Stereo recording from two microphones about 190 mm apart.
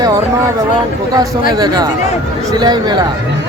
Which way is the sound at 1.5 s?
20° right (ahead or behind).